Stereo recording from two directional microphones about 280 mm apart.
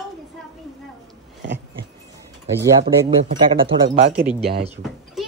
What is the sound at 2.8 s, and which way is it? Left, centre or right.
Speech, right.